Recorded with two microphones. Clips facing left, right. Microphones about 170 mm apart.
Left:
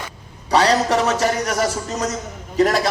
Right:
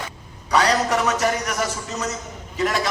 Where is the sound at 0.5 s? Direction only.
30° left (ahead or behind).